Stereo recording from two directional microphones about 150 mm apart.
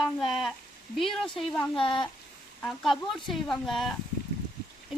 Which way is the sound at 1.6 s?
35° left (ahead or behind).